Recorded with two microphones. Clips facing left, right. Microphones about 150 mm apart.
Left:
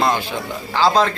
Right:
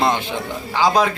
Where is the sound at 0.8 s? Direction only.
10° right (ahead or behind).